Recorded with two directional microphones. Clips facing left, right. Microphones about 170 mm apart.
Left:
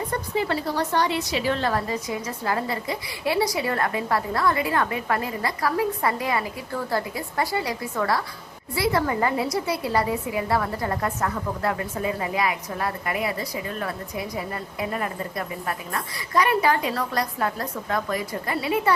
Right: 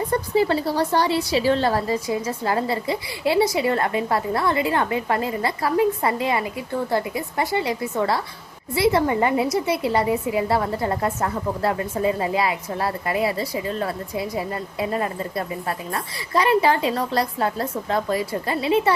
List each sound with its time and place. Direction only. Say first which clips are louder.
0.1 s a woman's voice: right 7 dB; 30° right (ahead or behind)